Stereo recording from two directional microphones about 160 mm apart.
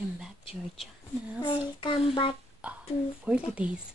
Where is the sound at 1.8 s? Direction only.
35° left (ahead or behind).